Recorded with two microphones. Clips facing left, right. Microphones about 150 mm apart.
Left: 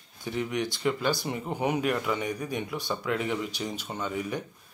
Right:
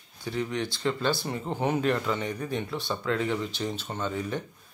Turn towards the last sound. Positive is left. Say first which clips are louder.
# right 1 dB
turn(degrees=10)  # may be behind; listen again after turning